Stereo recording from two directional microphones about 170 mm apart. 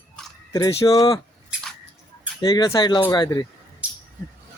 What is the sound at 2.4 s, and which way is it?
Speech, 25° left (ahead or behind).